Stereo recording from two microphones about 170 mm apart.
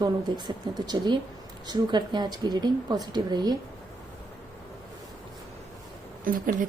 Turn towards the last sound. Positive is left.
turn(degrees=-55)  # may be behind; listen again after turning